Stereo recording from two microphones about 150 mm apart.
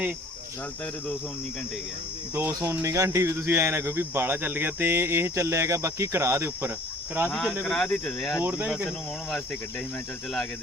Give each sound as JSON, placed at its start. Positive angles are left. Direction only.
{"t": 2.3, "sound": "speech", "side_deg": -15}
{"t": 7.3, "sound": "speech", "side_deg": 5}
{"t": 8.4, "sound": "speech", "side_deg": -10}